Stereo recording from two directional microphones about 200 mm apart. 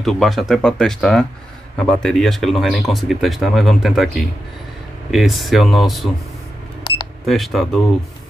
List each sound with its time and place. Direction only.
0.0 s speech: centre (ahead or behind)
7.2 s speech: centre (ahead or behind)